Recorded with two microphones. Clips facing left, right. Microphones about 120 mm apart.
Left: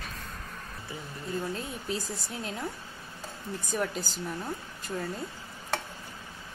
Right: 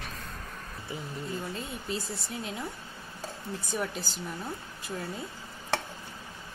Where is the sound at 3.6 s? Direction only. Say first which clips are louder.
Left 3 dB; centre (ahead or behind).